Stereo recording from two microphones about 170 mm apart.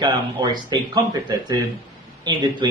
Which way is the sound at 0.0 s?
25° right (ahead or behind).